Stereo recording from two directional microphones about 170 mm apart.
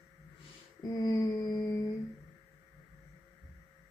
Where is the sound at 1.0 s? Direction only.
20° left (ahead or behind).